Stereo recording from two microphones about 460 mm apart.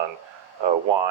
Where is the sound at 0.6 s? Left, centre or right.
Right.